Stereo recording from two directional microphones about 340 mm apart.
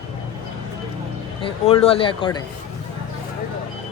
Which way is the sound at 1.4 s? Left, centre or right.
Centre.